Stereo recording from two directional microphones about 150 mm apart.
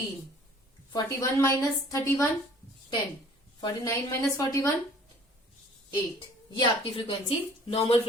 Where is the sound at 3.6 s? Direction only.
20° left (ahead or behind).